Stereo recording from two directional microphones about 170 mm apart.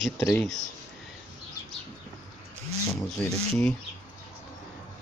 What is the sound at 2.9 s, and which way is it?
Speech, 10° left (ahead or behind).